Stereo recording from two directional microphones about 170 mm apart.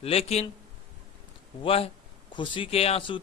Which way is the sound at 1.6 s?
35° left (ahead or behind).